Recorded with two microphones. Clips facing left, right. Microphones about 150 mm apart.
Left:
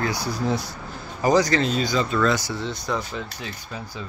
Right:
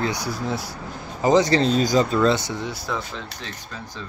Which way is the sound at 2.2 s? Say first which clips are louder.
Right 2 dB; 25° right (ahead or behind).